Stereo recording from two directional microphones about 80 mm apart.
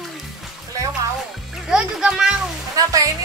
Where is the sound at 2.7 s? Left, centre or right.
Right.